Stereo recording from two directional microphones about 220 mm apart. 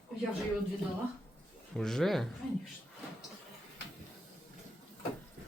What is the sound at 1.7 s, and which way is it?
Speech, centre (ahead or behind).